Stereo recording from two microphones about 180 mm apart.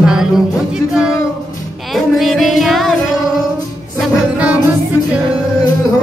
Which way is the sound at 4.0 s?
5° right (ahead or behind).